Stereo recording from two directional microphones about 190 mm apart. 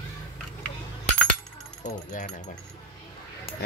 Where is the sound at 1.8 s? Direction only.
40° left (ahead or behind).